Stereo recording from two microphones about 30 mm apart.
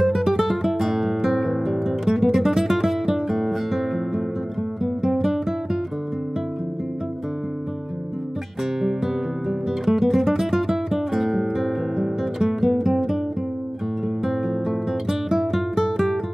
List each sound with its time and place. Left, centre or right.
0.0 s guitar: centre
8.8 s music: centre
14.2 s guitar: centre